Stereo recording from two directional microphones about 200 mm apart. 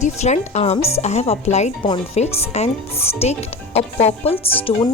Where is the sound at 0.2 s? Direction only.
35° left (ahead or behind).